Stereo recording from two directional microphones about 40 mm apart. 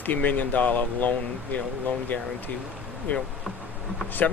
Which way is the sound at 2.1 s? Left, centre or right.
Left.